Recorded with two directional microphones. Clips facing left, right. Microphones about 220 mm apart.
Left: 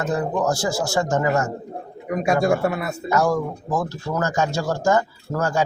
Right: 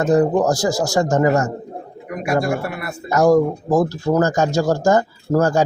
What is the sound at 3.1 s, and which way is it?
Speech, 40° right (ahead or behind).